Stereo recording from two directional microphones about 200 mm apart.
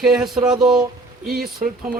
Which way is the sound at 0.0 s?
Centre (ahead or behind).